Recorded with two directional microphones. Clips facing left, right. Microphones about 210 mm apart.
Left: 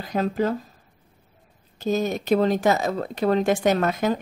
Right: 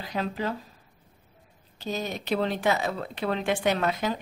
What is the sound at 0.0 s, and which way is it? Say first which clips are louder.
Speech: left 7 dB; 45° left (ahead or behind).